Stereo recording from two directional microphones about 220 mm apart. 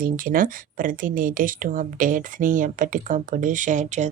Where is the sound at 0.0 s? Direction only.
40° right (ahead or behind).